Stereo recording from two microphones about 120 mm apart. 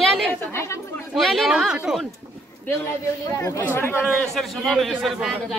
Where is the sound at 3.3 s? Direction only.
25° left (ahead or behind).